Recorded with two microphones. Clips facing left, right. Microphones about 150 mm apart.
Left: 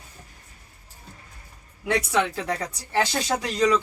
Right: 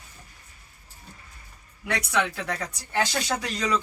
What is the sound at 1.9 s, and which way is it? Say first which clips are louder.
Speech: left 3 dB; 30° left (ahead or behind).